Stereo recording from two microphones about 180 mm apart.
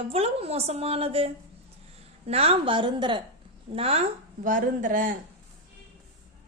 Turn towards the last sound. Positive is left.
turn(degrees=-50)  # may be behind; listen again after turning